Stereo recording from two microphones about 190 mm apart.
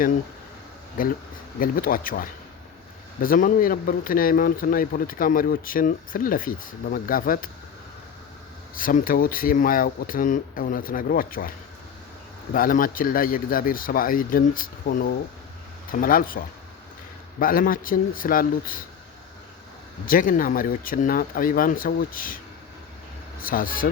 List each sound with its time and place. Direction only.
1.0 s speech: 50° left (ahead or behind)
8.7 s speech: 45° left (ahead or behind)
12.5 s speech: 45° left (ahead or behind)
17.4 s speech: 50° left (ahead or behind)
20.1 s speech: 45° left (ahead or behind)
23.4 s speech: 50° left (ahead or behind)